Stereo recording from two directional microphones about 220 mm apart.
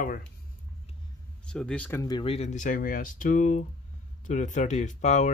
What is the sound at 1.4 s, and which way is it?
Speech, 5° left (ahead or behind).